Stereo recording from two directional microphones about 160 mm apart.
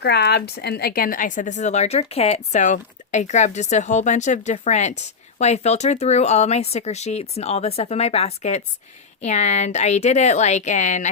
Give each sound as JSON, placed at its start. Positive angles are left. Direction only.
{"t": 0.0, "sound": "a woman's voice", "side_deg": 90}